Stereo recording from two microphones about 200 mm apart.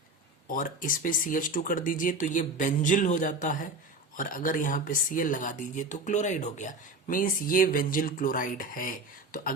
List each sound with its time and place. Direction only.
0.4 s speech: 40° left (ahead or behind)